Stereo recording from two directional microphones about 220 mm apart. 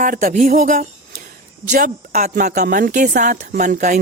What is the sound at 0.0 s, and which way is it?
A woman's voice, 40° right (ahead or behind).